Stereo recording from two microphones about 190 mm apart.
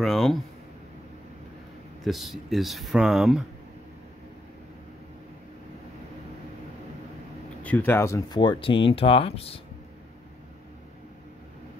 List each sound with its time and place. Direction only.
0.0 s speech: centre (ahead or behind)
2.0 s speech: centre (ahead or behind)
7.6 s speech: 10° left (ahead or behind); by 9.6 s 30° left (ahead or behind)